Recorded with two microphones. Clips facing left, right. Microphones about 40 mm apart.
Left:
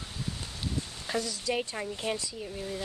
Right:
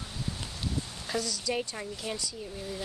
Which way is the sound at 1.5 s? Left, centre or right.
Centre.